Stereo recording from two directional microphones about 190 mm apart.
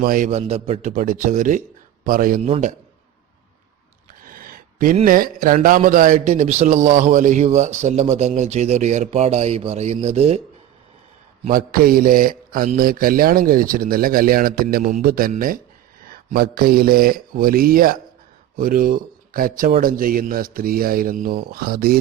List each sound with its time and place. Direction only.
0.0 s a man's voice: 45° right (ahead or behind)
2.4 s a man's voice: 35° right (ahead or behind)
4.2 s a sound: 50° right (ahead or behind)
5.0 s a man's voice: 45° right (ahead or behind)
11.4 s a man's voice: 50° right (ahead or behind)